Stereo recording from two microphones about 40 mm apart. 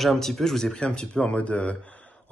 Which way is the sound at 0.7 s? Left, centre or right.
Left.